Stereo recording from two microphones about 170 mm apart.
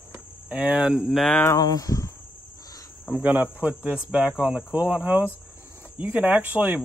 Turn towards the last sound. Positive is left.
turn(degrees=-10)  # may be behind; listen again after turning